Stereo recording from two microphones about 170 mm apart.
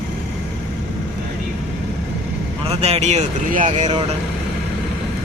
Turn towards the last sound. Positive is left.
turn(degrees=-30)  # may be behind; listen again after turning